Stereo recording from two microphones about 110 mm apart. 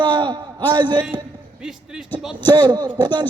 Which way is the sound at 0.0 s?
45° right (ahead or behind).